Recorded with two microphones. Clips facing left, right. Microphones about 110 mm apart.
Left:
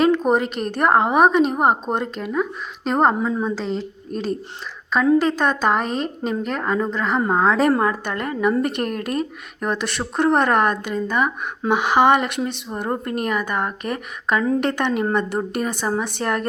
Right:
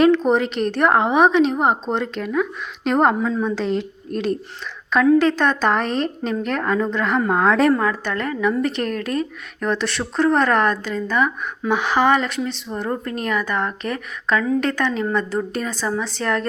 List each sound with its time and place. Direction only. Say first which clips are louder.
0.0 s a woman's voice: right 2 dB; 10° left (ahead or behind)
3.2 s a woman's voice: right 1 dB; 15° left (ahead or behind)
3.5 s a woman's voice: right 3 dB; centre (ahead or behind)
7.7 s speech: even; 30° left (ahead or behind)
8.0 s a woman's voice: right 1 dB; 15° left (ahead or behind)
8.4 s a woman's voice: left 2 dB; 50° left (ahead or behind)
9.0 s a woman's voice: right 1 dB; 25° left (ahead or behind)
16.2 s speech: right 2 dB; 30° left (ahead or behind)